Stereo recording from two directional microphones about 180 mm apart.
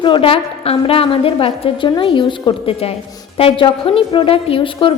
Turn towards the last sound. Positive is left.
turn(degrees=30)  # may be behind; listen again after turning